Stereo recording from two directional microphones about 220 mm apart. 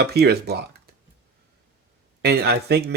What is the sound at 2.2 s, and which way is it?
Speech, 45° right (ahead or behind).